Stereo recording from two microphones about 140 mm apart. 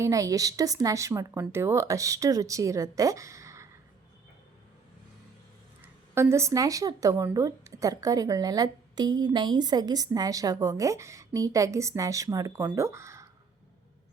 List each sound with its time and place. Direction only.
0.0 s speech: 25° right (ahead or behind)
6.1 s speech: 20° right (ahead or behind)